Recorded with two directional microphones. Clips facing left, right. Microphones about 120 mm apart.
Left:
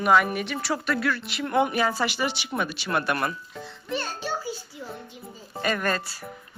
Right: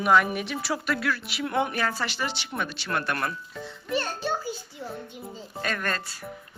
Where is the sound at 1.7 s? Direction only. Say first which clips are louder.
Left 4 dB; 15° left (ahead or behind).